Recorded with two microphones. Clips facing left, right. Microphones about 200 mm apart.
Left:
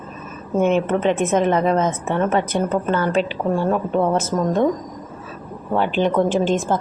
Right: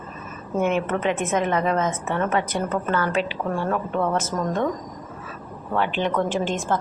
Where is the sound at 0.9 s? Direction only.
30° left (ahead or behind).